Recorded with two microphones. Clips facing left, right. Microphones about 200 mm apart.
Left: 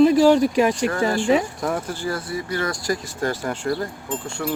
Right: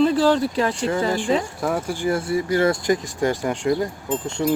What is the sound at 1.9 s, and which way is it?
Speech, 20° right (ahead or behind).